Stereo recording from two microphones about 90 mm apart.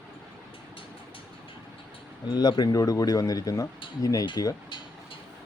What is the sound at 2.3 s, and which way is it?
Speech, 50° left (ahead or behind).